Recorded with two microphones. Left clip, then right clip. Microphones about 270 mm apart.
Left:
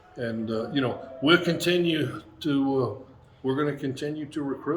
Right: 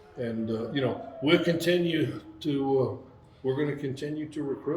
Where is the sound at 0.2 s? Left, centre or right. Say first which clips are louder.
Left 2 dB; centre.